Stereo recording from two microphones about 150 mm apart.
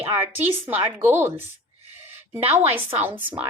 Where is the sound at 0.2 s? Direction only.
15° right (ahead or behind).